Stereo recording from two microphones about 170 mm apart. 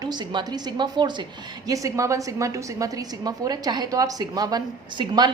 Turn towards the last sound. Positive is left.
turn(degrees=-25)  # may be behind; listen again after turning